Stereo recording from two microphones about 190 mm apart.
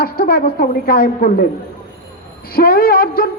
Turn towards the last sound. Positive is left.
turn(degrees=50)  # may be behind; listen again after turning